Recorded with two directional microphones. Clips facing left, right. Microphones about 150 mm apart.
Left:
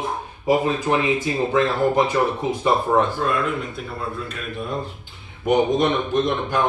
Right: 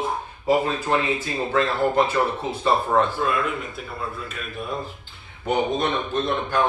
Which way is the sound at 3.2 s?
5° right (ahead or behind).